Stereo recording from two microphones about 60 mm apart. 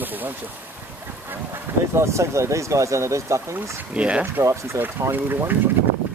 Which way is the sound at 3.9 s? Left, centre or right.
Centre.